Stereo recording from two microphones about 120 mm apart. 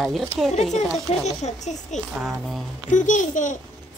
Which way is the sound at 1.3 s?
75° left (ahead or behind).